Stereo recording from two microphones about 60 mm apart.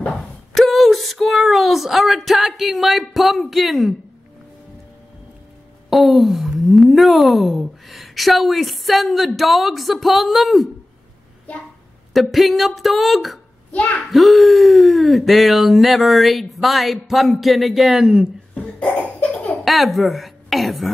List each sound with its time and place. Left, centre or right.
0.5 s speech: centre
5.9 s speech: centre
12.1 s speech: centre
18.5 s cough: centre
19.6 s speech: centre